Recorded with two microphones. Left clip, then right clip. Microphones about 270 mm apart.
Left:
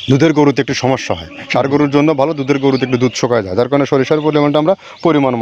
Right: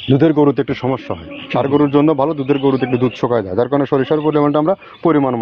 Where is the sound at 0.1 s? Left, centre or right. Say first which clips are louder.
Left 1 dB; left.